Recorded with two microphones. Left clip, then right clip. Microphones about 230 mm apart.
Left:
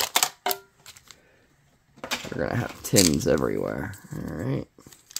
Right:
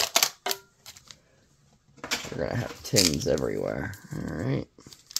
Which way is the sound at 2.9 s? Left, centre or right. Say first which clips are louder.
Left 3 dB; centre.